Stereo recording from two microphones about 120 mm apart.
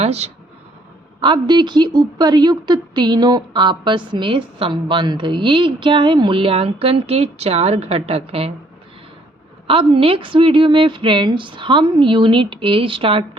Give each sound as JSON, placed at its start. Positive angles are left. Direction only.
{"t": 0.0, "sound": "speech", "side_deg": -60}
{"t": 1.2, "sound": "a woman's voice", "side_deg": -40}
{"t": 9.6, "sound": "a woman's voice", "side_deg": -50}